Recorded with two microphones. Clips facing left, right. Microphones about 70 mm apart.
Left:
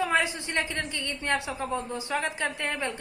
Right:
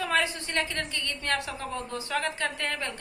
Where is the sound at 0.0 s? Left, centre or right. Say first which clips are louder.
Left 1 dB; centre.